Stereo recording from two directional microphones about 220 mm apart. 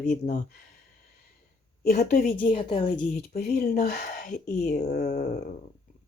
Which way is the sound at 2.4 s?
20° left (ahead or behind).